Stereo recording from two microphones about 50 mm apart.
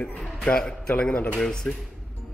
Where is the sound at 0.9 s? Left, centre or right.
Left.